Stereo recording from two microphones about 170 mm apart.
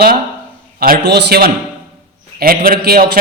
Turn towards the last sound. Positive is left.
turn(degrees=-65)  # may be behind; listen again after turning